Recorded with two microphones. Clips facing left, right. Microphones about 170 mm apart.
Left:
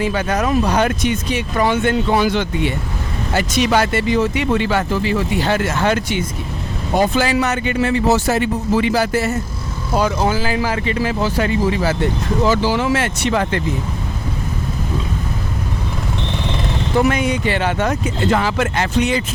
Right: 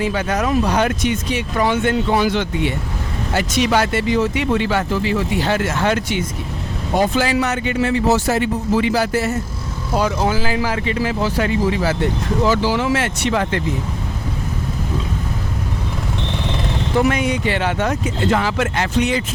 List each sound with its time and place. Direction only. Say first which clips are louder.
0.0 s speech: left 1 dB; 50° left (ahead or behind)
5.6 s speech: left 1 dB; 40° left (ahead or behind)
7.3 s a man's voice: left 1 dB; 60° left (ahead or behind)
9.9 s speech: left 1 dB; 45° left (ahead or behind)
11.3 s speech: even; 35° left (ahead or behind)
17.0 s speech: left 1 dB; 45° left (ahead or behind)